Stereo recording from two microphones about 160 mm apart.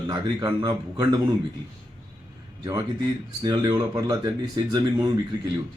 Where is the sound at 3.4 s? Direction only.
25° right (ahead or behind).